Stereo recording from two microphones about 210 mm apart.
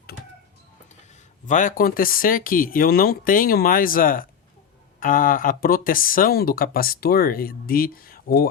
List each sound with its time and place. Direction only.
1.5 s speech: 35° left (ahead or behind)